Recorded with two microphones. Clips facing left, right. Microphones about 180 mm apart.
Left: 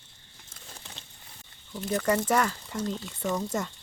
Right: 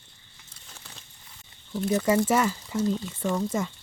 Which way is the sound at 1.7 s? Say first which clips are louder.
Right 3 dB; 5° right (ahead or behind).